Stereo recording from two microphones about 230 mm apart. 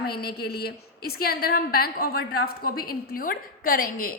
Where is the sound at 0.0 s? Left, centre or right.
Left.